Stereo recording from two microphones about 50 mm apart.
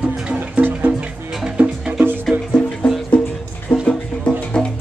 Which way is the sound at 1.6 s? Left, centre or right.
Right.